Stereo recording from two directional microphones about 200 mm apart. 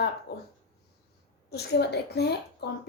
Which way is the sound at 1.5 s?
55° left (ahead or behind).